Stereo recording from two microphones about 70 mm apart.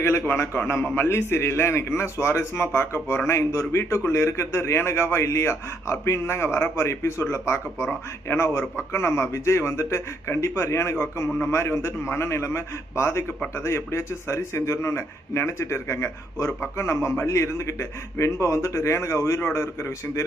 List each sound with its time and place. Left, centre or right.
0.0 s a man's voice: left